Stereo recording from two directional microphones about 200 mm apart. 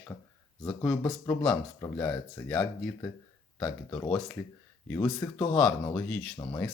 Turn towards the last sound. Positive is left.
turn(degrees=20)  # may be behind; listen again after turning